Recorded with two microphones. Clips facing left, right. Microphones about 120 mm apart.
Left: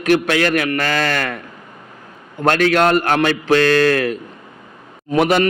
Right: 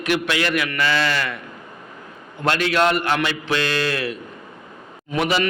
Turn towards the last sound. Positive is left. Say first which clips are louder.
# left 6 dB
turn(degrees=50)  # may be behind; listen again after turning